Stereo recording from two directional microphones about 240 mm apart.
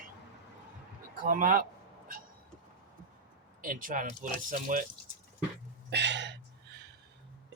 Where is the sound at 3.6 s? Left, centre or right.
Right.